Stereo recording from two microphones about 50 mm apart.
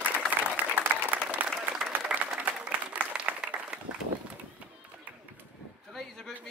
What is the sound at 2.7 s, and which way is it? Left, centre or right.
Applause, right.